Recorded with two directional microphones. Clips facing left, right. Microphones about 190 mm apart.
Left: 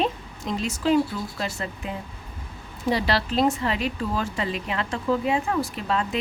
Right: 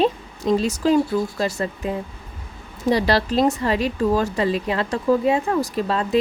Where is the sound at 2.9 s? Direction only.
40° right (ahead or behind).